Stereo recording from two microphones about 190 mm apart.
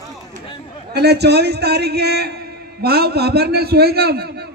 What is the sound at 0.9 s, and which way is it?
A man's voice, 60° right (ahead or behind).